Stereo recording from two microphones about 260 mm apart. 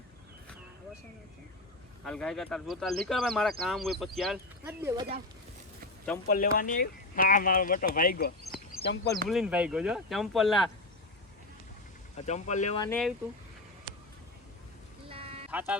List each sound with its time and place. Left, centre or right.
2.0 s speech: centre
6.2 s speech: left
9.3 s speech: centre
12.2 s speech: left
15.1 s music: right
15.4 s speech: centre